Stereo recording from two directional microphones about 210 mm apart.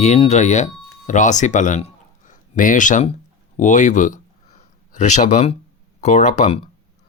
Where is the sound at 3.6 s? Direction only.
35° left (ahead or behind).